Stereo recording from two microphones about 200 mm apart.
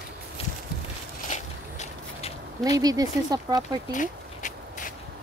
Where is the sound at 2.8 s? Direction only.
20° right (ahead or behind).